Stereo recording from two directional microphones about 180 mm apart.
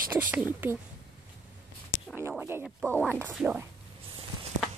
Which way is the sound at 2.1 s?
15° right (ahead or behind).